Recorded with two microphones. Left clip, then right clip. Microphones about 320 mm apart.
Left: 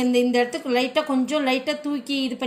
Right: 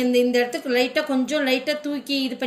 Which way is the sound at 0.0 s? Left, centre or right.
Left.